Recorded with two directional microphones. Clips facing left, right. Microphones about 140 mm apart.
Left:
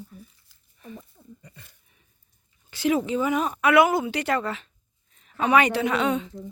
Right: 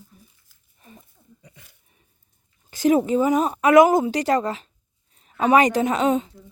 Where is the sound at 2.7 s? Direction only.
45° right (ahead or behind).